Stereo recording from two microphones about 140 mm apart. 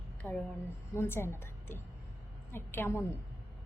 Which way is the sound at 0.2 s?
5° left (ahead or behind).